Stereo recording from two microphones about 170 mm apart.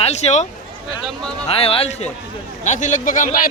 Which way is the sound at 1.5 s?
35° left (ahead or behind).